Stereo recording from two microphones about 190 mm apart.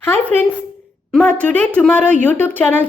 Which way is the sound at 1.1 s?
5° left (ahead or behind).